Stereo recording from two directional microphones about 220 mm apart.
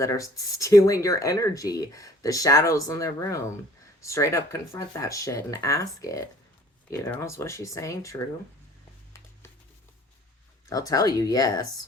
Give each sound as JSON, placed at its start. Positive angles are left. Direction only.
{"t": 0.0, "sound": "speech", "side_deg": 15}
{"t": 10.7, "sound": "speech", "side_deg": 15}